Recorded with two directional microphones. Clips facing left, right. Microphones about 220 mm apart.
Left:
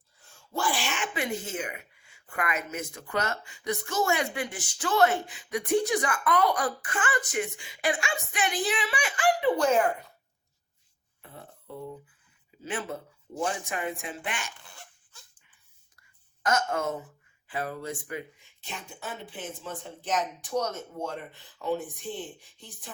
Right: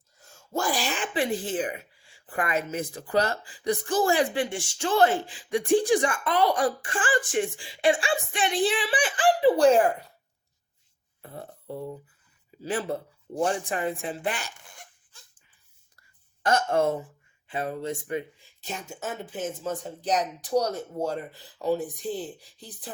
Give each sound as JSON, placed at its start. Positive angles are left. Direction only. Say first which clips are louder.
{"t": 0.2, "sound": "speech", "louder": "right 3 dB", "side_deg": -40}
{"t": 11.2, "sound": "burping", "louder": "right 6 dB", "side_deg": -40}
{"t": 12.6, "sound": "speech", "louder": "right 5 dB", "side_deg": -35}
{"t": 16.4, "sound": "speech", "louder": "right 5 dB", "side_deg": -30}